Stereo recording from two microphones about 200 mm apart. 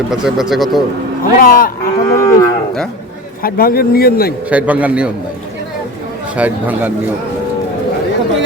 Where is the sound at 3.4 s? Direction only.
50° left (ahead or behind).